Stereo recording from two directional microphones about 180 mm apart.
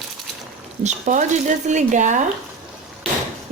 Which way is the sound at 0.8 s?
40° right (ahead or behind).